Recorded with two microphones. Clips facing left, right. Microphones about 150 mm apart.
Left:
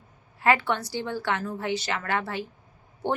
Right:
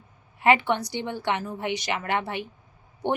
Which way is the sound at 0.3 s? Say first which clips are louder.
Right 2 dB; 20° right (ahead or behind).